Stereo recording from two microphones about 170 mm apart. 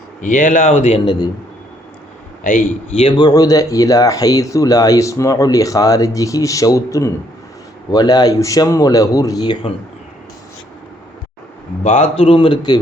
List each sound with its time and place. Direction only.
0.2 s a man's voice: 50° left (ahead or behind); by 1.3 s 30° left (ahead or behind)
2.4 s a man's voice: 55° left (ahead or behind)
3.0 s speech: 25° left (ahead or behind)
11.8 s speech: 40° left (ahead or behind)